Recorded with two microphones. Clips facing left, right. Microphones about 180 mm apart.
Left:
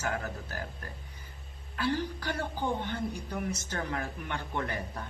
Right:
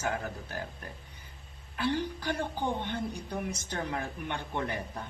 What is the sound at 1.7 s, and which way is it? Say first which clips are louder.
A woman's voice: even; 15° right (ahead or behind).